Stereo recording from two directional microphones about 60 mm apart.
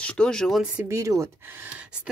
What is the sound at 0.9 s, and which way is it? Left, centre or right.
Speech, right.